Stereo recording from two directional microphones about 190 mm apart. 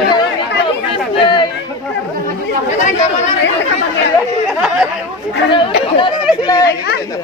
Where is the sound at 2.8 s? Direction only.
40° left (ahead or behind).